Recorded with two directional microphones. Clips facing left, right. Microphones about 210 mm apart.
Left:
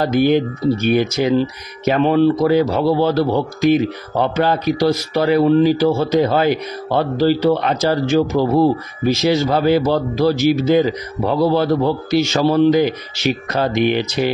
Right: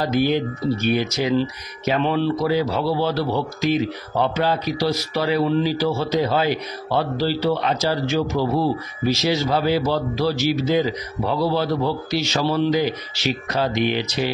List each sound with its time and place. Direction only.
0.0 s speech: 50° left (ahead or behind)